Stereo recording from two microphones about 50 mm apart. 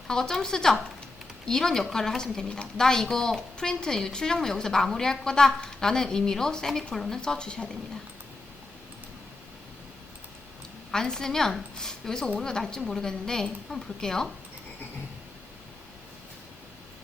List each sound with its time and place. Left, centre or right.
0.1 s a woman's voice: centre
7.2 s a woman's voice: centre
10.9 s a woman's voice: centre